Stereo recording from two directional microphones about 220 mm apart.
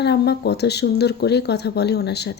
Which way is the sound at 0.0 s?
50° left (ahead or behind).